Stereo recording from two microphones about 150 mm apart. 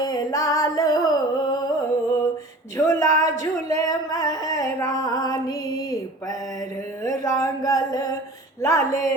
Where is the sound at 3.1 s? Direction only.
55° right (ahead or behind).